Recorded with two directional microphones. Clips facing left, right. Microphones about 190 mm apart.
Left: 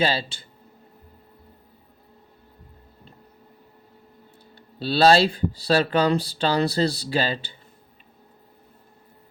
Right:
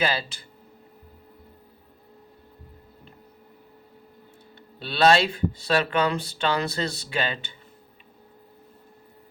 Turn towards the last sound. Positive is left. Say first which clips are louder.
# left 4 dB
turn(degrees=35)  # may be behind; listen again after turning